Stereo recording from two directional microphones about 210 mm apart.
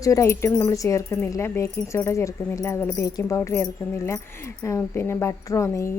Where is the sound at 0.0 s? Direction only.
15° left (ahead or behind).